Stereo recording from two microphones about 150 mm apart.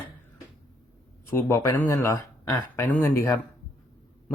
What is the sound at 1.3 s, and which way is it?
Speech, 15° left (ahead or behind).